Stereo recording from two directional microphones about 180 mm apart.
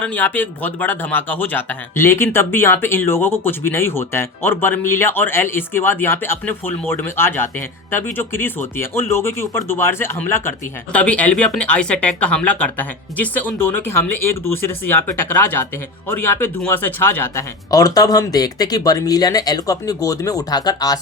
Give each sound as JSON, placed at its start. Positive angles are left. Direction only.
{"t": 0.0, "sound": "speech", "side_deg": 10}